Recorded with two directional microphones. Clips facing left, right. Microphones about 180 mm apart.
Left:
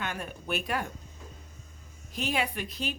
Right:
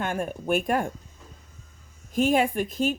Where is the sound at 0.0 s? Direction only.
45° right (ahead or behind).